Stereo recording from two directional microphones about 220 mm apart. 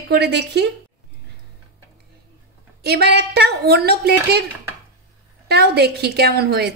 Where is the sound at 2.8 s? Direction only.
45° right (ahead or behind).